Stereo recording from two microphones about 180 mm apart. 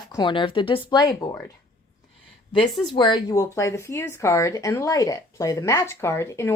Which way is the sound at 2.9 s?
25° left (ahead or behind).